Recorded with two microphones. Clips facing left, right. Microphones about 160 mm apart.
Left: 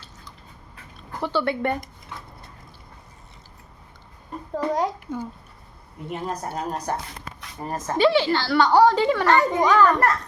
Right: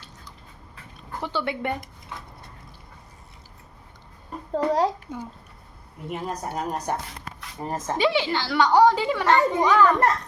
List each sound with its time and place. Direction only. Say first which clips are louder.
1.2 s a woman's voice: left 4 dB; 15° right (ahead or behind)
4.5 s a child's voice: right 2 dB; 30° right (ahead or behind)
5.1 s a woman's voice: left 4 dB; centre (ahead or behind)
7.6 s a woman's voice: left 3 dB; 20° right (ahead or behind)